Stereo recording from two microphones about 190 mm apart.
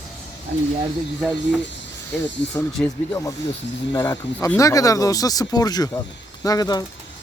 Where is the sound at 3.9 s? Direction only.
20° left (ahead or behind).